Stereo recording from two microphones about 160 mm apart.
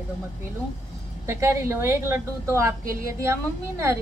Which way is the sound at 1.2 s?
15° right (ahead or behind).